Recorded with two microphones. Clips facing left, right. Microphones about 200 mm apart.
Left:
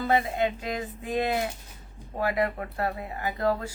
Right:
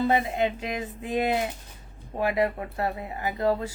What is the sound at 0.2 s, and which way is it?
Speech, 20° right (ahead or behind).